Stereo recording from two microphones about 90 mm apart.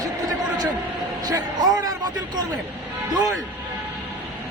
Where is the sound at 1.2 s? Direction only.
45° right (ahead or behind).